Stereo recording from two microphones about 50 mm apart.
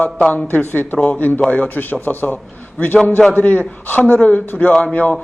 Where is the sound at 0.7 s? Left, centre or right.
Left.